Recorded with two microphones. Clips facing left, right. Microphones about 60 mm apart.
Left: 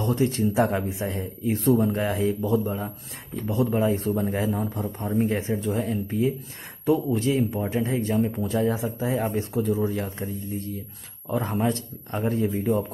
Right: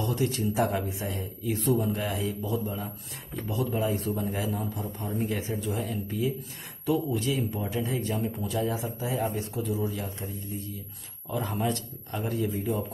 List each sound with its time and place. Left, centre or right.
0.0 s speech: left
3.4 s a man's voice: left
11.2 s speech: left